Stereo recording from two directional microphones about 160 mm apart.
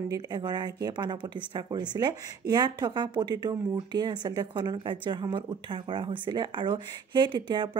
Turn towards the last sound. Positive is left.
turn(degrees=-30)  # may be behind; listen again after turning